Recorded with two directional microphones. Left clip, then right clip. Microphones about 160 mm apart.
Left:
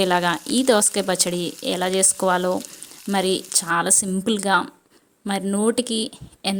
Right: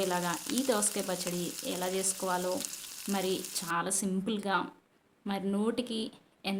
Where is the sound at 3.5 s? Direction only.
50° left (ahead or behind).